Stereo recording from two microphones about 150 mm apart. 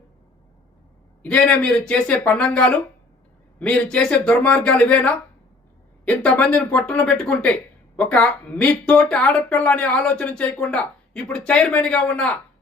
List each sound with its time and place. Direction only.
1.2 s speech: 10° left (ahead or behind)